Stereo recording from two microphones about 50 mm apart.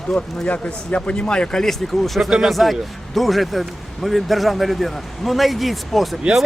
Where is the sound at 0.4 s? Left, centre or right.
Left.